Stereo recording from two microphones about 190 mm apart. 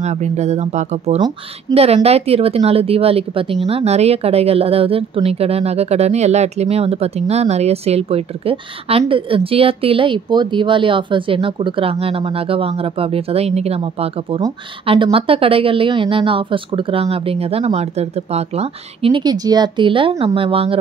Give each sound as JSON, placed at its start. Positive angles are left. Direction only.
{"t": 0.0, "sound": "speech", "side_deg": -35}